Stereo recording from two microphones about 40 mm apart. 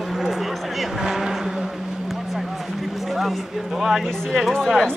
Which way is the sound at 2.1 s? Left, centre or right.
Centre.